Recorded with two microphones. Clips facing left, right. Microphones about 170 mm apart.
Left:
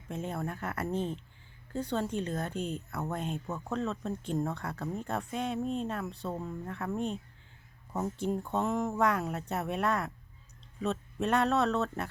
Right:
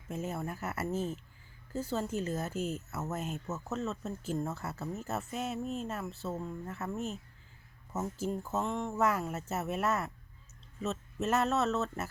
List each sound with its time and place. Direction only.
0.1 s speech: 5° right (ahead or behind)
8.2 s speech: 5° right (ahead or behind)